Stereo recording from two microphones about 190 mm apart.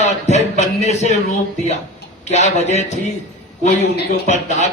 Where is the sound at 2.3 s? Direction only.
35° left (ahead or behind).